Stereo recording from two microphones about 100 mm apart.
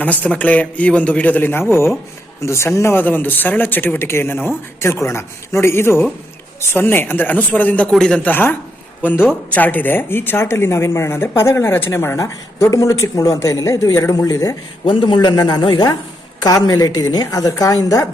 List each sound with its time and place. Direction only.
0.0 s a woman's voice: 15° left (ahead or behind); by 14.5 s 35° left (ahead or behind)
14.8 s a man's voice: 50° left (ahead or behind)